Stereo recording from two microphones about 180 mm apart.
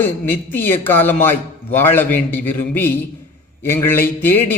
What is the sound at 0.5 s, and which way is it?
A man's voice, 10° left (ahead or behind).